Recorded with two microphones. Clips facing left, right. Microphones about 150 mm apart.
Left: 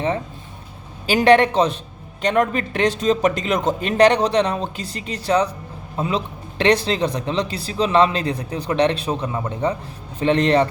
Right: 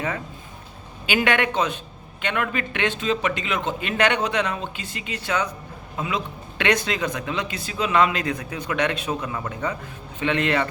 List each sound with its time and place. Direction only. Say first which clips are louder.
1.0 s a man's voice: left 8 dB; 35° left (ahead or behind)